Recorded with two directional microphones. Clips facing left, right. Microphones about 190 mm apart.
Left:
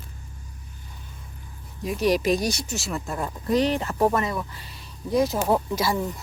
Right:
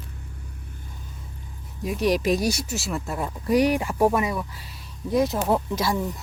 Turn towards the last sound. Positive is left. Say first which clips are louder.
# even
turn(degrees=0)  # may be behind; listen again after turning